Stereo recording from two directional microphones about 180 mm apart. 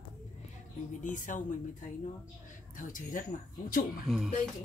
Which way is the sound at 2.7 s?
45° left (ahead or behind).